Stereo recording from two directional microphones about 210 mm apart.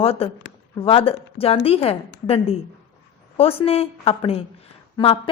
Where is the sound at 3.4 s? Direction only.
25° left (ahead or behind).